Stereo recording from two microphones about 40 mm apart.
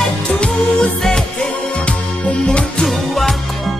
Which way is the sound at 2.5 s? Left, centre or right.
Centre.